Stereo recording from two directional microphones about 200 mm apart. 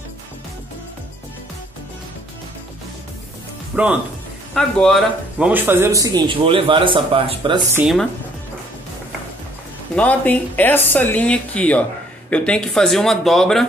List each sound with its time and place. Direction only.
3.7 s speech: 5° right (ahead or behind)
5.5 s a man's voice: 10° right (ahead or behind)
7.7 s speech: centre (ahead or behind)
9.9 s speech: 5° left (ahead or behind)